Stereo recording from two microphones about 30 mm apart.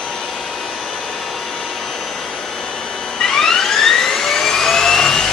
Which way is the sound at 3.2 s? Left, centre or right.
Centre.